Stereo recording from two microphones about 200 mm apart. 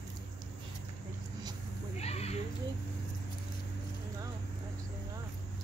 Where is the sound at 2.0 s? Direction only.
30° left (ahead or behind).